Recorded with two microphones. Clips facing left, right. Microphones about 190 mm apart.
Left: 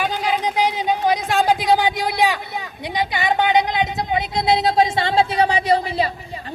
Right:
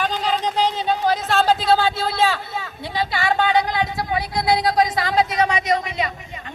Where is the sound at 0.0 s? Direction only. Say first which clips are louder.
Left 1 dB; 10° left (ahead or behind).